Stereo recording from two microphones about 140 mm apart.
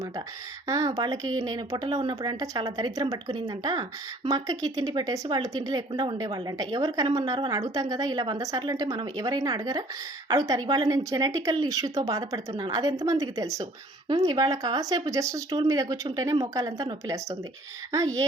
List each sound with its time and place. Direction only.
0.7 s speech: 25° right (ahead or behind)